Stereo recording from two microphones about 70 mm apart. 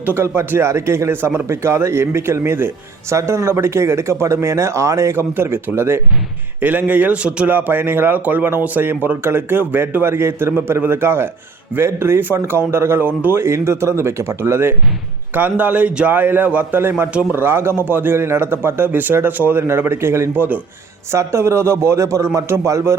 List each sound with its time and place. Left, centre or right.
0.0 s speech: right
5.4 s speech: right
6.6 s a man's voice: right
7.5 s speech: right
13.4 s speech: right
15.4 s a man's voice: right
20.3 s a man's voice: right
21.1 s speech: right